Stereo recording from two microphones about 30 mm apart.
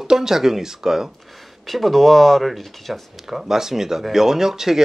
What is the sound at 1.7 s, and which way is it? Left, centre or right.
Speech, centre.